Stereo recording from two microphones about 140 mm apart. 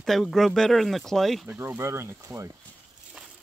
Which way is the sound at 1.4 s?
15° right (ahead or behind).